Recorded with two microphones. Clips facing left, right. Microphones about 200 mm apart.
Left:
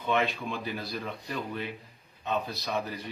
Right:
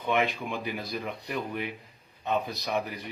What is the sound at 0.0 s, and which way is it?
Speech, 15° right (ahead or behind).